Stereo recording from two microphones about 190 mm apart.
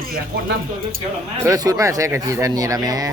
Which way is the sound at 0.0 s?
50° right (ahead or behind).